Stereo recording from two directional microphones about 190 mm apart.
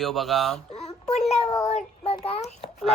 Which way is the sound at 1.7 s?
35° left (ahead or behind).